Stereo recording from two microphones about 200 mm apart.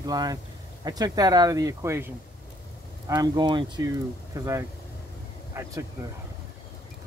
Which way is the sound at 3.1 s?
20° right (ahead or behind).